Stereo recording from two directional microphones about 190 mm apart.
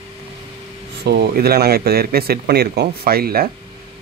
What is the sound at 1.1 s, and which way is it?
Speech, 60° right (ahead or behind).